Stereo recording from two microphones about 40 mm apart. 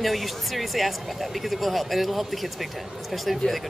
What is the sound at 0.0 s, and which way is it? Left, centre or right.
Speech, centre.